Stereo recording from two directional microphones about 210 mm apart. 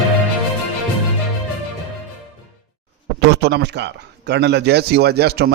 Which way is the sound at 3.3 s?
50° right (ahead or behind).